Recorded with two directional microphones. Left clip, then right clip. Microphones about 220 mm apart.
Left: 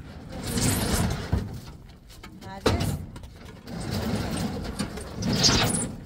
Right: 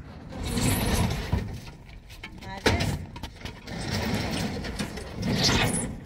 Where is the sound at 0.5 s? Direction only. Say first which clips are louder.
Left 1 dB; centre (ahead or behind).